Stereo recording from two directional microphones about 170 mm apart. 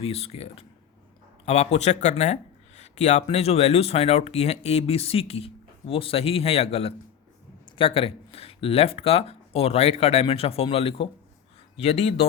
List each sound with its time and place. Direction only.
0.0 s speech: 35° left (ahead or behind)